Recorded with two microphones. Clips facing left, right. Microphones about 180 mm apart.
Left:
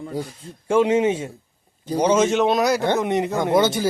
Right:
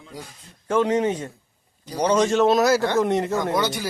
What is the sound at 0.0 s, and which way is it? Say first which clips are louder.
Speech: left 11 dB; 50° left (ahead or behind).